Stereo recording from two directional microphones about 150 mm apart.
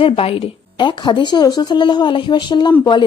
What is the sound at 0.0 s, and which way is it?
A woman's voice, 40° left (ahead or behind).